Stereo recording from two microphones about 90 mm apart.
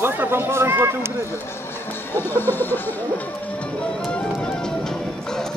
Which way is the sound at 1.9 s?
25° left (ahead or behind).